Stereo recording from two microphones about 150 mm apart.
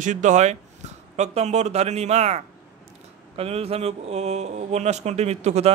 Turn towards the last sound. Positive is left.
turn(degrees=-45)  # may be behind; listen again after turning